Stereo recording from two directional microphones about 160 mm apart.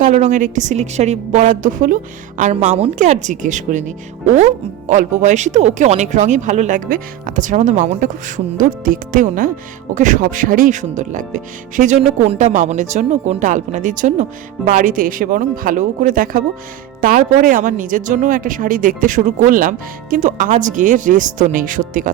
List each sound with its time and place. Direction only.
0.0 s a woman's voice: 50° right (ahead or behind)